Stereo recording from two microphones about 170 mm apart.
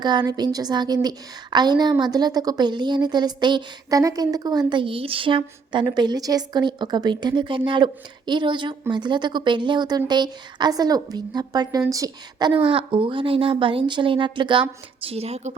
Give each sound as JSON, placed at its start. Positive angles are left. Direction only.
{"t": 0.0, "sound": "a woman's voice", "side_deg": -25}